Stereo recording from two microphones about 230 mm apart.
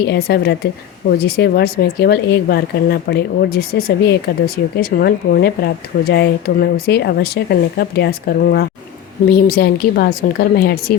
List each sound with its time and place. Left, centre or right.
0.0 s speech: left